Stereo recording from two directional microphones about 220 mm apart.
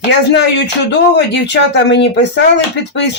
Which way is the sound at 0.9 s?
50° left (ahead or behind).